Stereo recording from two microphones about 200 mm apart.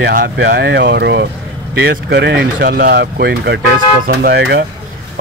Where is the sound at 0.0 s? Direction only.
55° right (ahead or behind).